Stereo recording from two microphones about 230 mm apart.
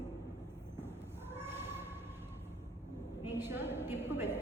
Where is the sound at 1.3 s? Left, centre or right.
Centre.